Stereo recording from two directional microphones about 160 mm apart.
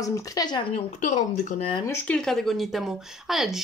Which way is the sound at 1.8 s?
5° left (ahead or behind).